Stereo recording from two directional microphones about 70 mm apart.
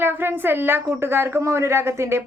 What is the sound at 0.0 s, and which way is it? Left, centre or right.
A woman's voice, right.